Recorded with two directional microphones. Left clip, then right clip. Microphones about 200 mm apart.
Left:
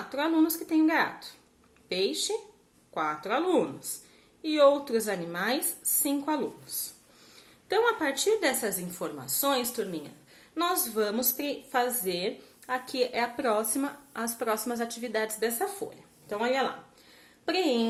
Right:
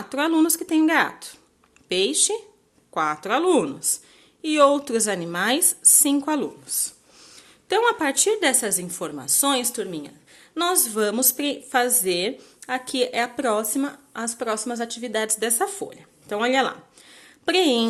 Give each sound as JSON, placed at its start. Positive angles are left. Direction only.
{"t": 0.1, "sound": "a woman's voice", "side_deg": -45}
{"t": 7.7, "sound": "a woman's voice", "side_deg": -40}